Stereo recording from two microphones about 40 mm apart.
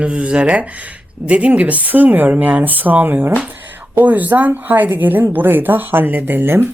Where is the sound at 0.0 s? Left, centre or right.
Right.